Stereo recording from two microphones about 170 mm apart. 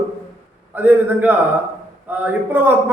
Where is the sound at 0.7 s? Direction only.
10° right (ahead or behind).